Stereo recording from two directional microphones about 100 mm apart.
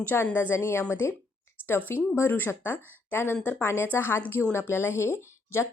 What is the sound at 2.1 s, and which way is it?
Speech, 20° left (ahead or behind).